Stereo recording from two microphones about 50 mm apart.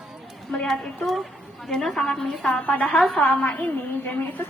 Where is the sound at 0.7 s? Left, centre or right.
Centre.